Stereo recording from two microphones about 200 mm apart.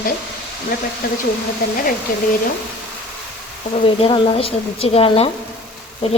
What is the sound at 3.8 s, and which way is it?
Speech, 25° left (ahead or behind).